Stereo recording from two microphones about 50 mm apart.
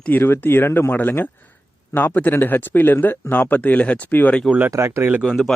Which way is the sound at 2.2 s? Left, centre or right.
Left.